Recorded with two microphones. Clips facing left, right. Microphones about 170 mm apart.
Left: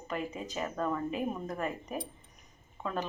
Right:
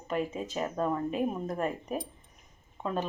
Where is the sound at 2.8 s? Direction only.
20° right (ahead or behind).